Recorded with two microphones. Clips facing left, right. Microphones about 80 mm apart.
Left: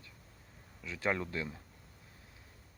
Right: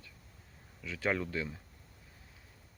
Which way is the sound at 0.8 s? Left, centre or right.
Centre.